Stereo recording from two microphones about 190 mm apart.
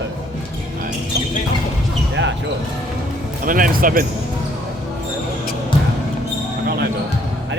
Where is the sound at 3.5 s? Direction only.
45° right (ahead or behind).